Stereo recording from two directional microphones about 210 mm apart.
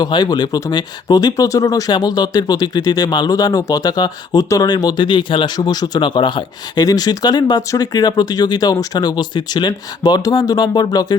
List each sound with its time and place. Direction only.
0.0 s speech: 20° left (ahead or behind)